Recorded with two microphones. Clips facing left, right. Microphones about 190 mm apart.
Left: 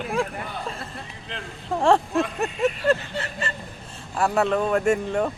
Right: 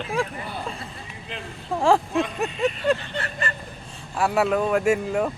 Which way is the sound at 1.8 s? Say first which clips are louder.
Even; centre (ahead or behind).